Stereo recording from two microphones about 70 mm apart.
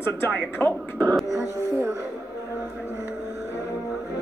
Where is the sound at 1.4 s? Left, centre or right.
Left.